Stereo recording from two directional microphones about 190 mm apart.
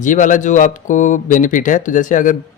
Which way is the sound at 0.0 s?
40° left (ahead or behind).